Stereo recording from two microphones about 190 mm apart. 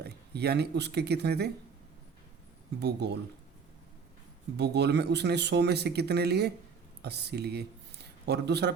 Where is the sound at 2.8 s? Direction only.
60° right (ahead or behind).